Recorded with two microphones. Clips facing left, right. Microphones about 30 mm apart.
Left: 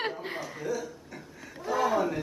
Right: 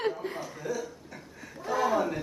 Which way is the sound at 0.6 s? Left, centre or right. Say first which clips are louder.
Left 1 dB; centre.